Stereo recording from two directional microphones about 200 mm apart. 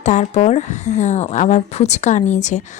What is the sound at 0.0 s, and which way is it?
Speech, 35° left (ahead or behind).